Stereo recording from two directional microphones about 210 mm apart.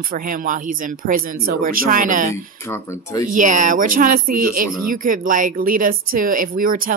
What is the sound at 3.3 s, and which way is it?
Speech, 35° right (ahead or behind).